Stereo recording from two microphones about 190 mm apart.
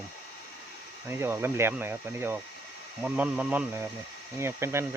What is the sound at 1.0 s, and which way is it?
Speech, 10° right (ahead or behind).